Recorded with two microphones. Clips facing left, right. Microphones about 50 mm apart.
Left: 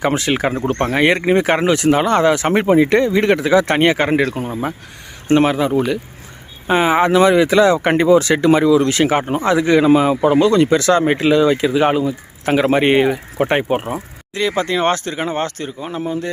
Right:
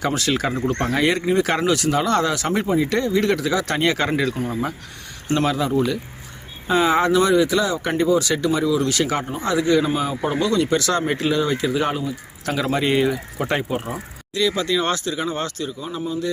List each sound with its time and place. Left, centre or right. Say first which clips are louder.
0.0 s speech: left 4 dB; left
0.6 s speech: left 4 dB; left
1.4 s speech: left 4 dB; left
2.6 s speech: left 7 dB; left
2.9 s speech: left 6 dB; left
4.3 s speech: left 2 dB; left
7.2 s speech: left 6 dB; left
8.2 s speech: left 6 dB; left
8.5 s a man's voice: left 7 dB; left
8.9 s speech: left 6 dB; left
9.8 s a man's voice: left 10 dB; left
10.4 s speech: left 7 dB; left
11.0 s speech: left 7 dB; left
12.0 s speech: left 7 dB; left